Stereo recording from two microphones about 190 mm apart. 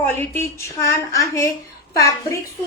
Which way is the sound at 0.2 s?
15° left (ahead or behind).